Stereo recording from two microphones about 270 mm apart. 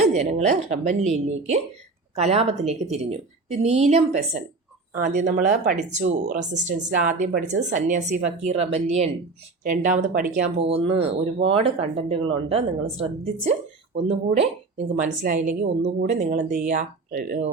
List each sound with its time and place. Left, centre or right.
0.1 s speech: right